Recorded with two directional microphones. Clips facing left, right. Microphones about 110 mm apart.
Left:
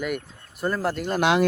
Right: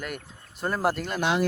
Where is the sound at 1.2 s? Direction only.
90° left.